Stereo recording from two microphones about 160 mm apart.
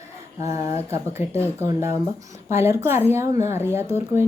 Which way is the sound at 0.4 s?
20° right (ahead or behind).